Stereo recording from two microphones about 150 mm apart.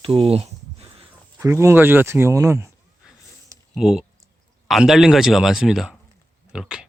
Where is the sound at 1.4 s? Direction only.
20° right (ahead or behind).